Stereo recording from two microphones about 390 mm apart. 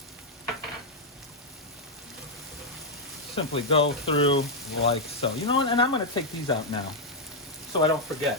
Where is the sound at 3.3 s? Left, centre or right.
Centre.